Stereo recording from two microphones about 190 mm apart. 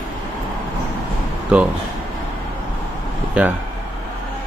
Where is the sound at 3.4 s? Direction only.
5° right (ahead or behind).